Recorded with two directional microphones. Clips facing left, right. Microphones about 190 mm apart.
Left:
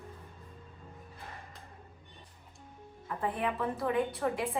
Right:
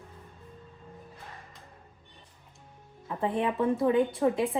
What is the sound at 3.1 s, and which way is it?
A woman's voice, 25° right (ahead or behind).